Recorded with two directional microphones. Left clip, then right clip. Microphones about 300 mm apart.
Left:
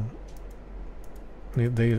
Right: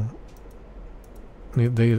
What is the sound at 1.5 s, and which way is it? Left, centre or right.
Speech, centre.